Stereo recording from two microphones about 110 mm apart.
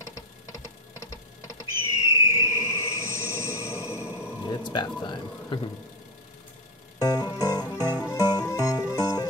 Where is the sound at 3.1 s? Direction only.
25° left (ahead or behind).